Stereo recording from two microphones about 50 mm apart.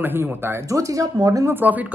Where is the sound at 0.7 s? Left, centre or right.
Right.